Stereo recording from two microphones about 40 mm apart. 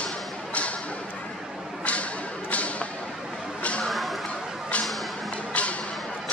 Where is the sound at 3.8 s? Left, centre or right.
Centre.